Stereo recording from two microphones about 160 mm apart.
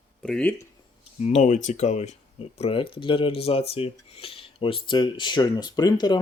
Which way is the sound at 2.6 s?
35° left (ahead or behind).